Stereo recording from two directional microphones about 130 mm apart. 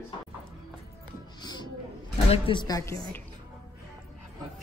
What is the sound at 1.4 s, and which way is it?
Music, 35° left (ahead or behind).